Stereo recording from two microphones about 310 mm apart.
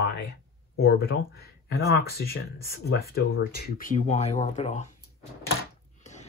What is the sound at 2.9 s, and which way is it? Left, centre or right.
Speech, left.